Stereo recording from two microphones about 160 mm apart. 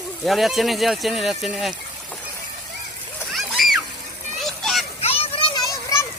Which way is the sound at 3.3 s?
Centre (ahead or behind).